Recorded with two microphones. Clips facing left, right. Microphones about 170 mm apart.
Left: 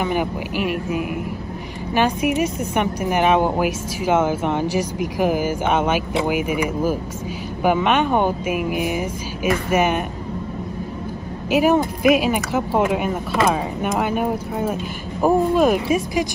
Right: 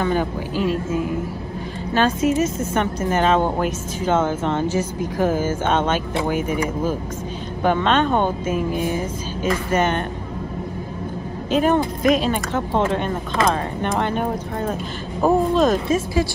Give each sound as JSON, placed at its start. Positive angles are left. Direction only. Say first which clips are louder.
{"t": 0.0, "sound": "speech", "louder": "right 1 dB", "side_deg": 15}
{"t": 11.5, "sound": "speech", "louder": "left 1 dB", "side_deg": 10}